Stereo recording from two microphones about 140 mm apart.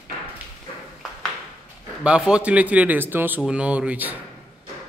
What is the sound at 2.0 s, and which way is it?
Speech, 5° right (ahead or behind).